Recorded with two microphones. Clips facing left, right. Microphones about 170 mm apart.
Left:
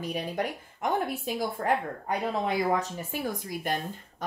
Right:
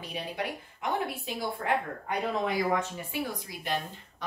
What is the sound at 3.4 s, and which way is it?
Speech, 50° left (ahead or behind).